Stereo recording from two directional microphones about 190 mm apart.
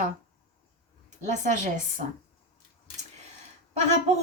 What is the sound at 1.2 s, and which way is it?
Speech, 40° right (ahead or behind).